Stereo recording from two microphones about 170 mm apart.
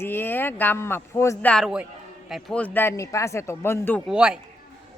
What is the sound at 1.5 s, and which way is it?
Speech, centre (ahead or behind).